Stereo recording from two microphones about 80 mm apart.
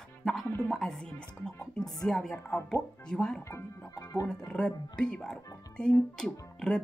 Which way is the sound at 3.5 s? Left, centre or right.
Left.